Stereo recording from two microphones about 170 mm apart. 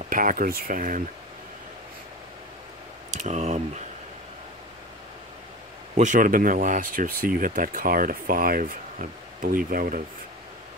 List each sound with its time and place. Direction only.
0.0 s speech: 55° right (ahead or behind)
3.1 s speech: 45° right (ahead or behind)
5.9 s speech: 50° right (ahead or behind)